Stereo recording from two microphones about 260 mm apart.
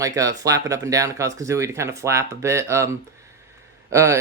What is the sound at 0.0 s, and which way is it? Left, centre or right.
Speech, centre.